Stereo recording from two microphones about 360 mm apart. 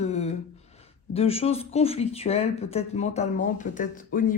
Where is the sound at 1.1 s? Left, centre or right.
Centre.